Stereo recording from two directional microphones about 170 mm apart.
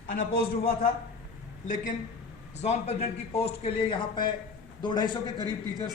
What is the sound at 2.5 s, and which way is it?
A man's voice, 40° left (ahead or behind).